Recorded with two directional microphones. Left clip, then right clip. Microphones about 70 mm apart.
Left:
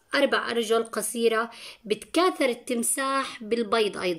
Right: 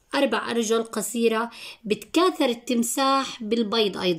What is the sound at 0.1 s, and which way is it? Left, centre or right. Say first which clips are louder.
A woman's voice: even; right.